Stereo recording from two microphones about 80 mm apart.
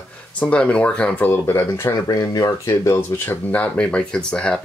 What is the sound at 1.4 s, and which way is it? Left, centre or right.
Speech, left.